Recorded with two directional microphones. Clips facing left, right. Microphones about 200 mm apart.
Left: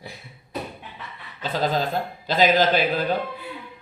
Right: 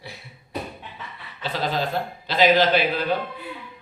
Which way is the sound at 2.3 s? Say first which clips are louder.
Right 1 dB; 45° left (ahead or behind).